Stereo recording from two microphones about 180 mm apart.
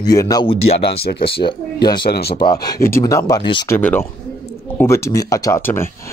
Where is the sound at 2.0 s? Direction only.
60° left (ahead or behind).